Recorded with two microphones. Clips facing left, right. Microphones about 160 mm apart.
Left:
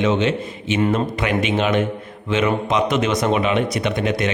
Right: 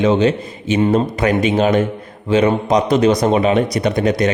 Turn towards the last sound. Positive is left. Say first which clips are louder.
# right 5 dB
turn(degrees=-40)  # may be behind; listen again after turning